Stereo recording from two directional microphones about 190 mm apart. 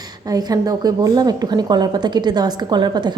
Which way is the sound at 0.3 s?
20° right (ahead or behind).